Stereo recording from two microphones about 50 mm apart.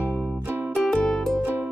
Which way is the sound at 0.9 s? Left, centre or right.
Centre.